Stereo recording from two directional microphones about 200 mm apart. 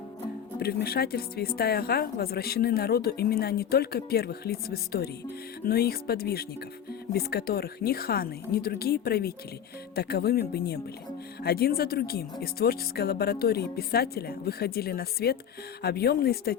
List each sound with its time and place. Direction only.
0.6 s a woman's voice: 50° left (ahead or behind)